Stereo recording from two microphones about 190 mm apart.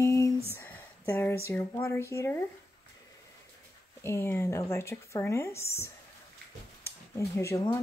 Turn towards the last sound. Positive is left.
turn(degrees=15)  # may be behind; listen again after turning